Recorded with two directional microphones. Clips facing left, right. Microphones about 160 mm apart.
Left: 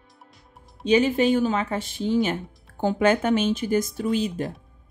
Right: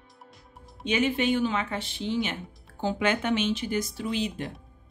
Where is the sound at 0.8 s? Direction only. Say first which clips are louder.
Left 6 dB; 35° left (ahead or behind).